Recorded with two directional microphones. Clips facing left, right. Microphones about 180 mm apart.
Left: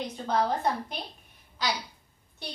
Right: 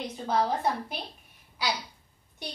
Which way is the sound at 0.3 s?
5° right (ahead or behind).